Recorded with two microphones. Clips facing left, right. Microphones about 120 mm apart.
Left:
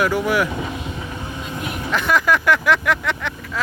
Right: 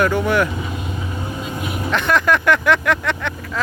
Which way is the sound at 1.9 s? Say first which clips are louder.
Right 1 dB; 5° left (ahead or behind).